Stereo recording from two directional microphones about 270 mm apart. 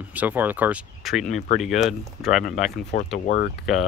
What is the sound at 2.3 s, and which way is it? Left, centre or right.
Speech, left.